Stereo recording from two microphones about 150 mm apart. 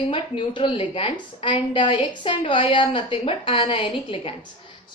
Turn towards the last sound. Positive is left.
turn(degrees=35)  # may be behind; listen again after turning